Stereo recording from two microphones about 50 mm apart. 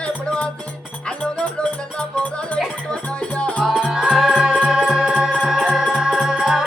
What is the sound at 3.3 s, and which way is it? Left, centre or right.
Music, left.